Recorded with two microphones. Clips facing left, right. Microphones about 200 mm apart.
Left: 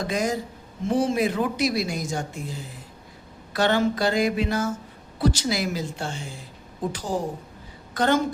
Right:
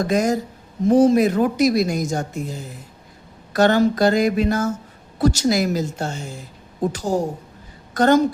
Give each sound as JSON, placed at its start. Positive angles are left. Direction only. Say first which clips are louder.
{"t": 0.0, "sound": "speech", "louder": "right 6 dB", "side_deg": -45}